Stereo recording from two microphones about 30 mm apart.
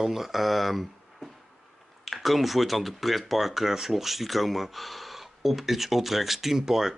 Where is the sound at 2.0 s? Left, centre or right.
Centre.